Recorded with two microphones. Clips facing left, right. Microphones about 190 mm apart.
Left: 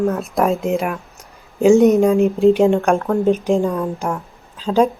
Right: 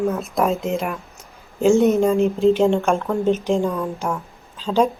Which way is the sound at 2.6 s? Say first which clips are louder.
Left 3 dB; centre (ahead or behind).